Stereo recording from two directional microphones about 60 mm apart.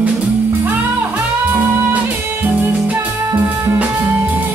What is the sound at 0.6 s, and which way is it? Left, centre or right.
Music, right.